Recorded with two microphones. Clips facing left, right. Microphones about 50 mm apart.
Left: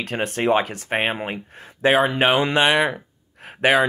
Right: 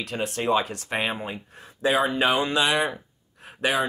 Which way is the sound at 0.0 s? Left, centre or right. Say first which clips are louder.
Left 4 dB; left.